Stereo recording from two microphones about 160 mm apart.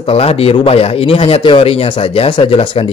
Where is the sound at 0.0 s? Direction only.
35° left (ahead or behind).